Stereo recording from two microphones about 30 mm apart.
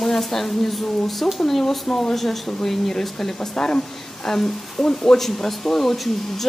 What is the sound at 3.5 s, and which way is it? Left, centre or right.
Speech, left.